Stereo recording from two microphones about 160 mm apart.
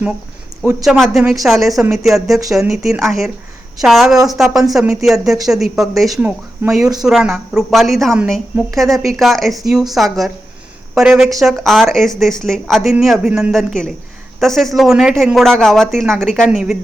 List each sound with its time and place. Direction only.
0.6 s a man's voice: 20° right (ahead or behind)
0.9 s a woman's voice: centre (ahead or behind)